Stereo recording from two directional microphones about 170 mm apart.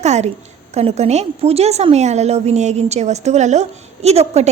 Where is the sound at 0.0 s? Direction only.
40° right (ahead or behind).